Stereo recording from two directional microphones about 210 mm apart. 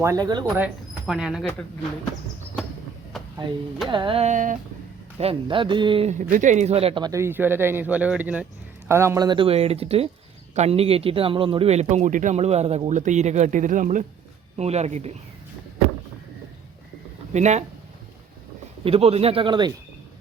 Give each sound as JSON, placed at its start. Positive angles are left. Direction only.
{"t": 0.0, "sound": "speech", "side_deg": -15}
{"t": 0.6, "sound": "speech", "side_deg": -5}
{"t": 3.8, "sound": "a man's voice", "side_deg": -25}
{"t": 17.3, "sound": "a man's voice", "side_deg": -35}
{"t": 18.9, "sound": "a man's voice", "side_deg": -30}